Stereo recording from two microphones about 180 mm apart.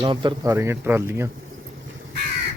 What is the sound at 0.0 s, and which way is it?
Speech, 25° right (ahead or behind).